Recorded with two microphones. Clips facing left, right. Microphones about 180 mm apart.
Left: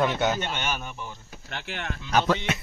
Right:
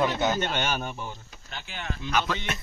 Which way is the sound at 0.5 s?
35° right (ahead or behind).